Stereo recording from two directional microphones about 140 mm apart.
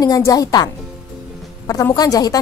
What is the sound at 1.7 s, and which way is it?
Speech, 25° left (ahead or behind).